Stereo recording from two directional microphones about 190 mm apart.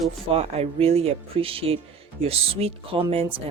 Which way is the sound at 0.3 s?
30° right (ahead or behind).